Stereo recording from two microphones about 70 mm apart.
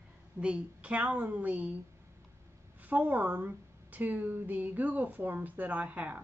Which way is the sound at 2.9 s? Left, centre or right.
Right.